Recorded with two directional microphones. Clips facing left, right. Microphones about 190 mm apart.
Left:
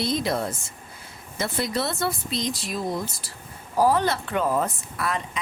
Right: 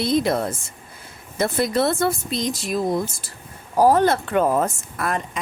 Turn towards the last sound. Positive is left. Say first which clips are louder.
# right 3 dB
turn(degrees=-45)  # may be behind; listen again after turning